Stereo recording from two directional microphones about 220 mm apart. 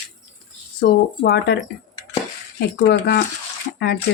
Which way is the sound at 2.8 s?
50° left (ahead or behind).